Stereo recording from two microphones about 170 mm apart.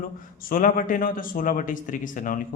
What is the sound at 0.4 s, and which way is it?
A man's voice, 55° left (ahead or behind).